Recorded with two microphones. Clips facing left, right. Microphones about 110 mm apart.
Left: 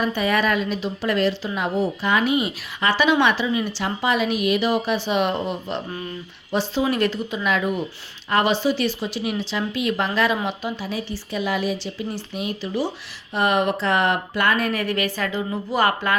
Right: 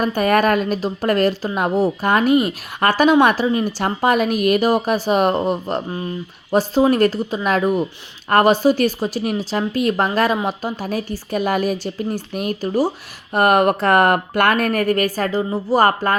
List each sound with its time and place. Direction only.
0.0 s a woman's voice: 50° right (ahead or behind)
13.3 s a woman's voice: 55° right (ahead or behind)